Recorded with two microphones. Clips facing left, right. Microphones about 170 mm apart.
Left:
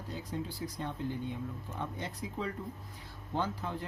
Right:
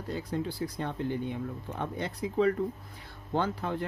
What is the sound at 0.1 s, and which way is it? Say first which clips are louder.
Speech: right 6 dB; 65° right (ahead or behind).